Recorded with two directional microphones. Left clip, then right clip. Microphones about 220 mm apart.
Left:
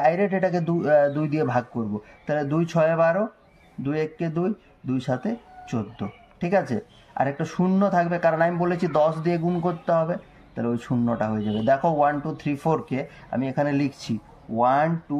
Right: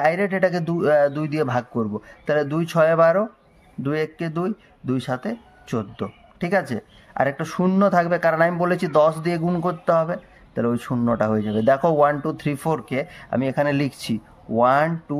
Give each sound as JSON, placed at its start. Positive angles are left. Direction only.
{"t": 0.0, "sound": "speech", "side_deg": -40}